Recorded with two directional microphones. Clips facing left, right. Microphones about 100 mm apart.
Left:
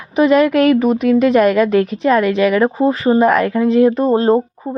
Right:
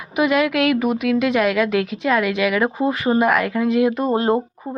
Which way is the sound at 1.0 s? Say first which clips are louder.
Left 7 dB; 40° left (ahead or behind).